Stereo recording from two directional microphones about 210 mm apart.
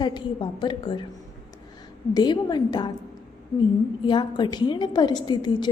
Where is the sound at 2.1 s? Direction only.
20° left (ahead or behind).